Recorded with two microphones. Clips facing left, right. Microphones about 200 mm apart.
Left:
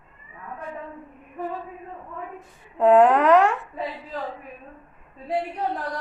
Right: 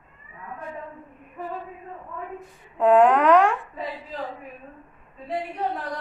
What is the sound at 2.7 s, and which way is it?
Speech, 5° left (ahead or behind).